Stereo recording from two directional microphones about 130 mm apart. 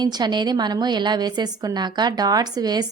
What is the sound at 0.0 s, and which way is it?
A woman's voice, 35° right (ahead or behind).